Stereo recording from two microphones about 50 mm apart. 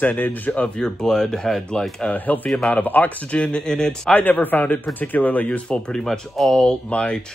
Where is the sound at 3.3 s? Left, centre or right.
Centre.